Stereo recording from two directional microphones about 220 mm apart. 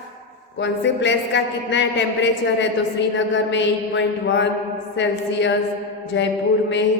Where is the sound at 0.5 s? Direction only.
55° left (ahead or behind).